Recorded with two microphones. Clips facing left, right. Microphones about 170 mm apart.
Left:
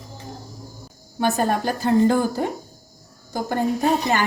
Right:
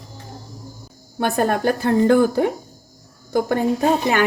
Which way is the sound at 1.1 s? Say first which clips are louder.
Right 1 dB; 55° right (ahead or behind).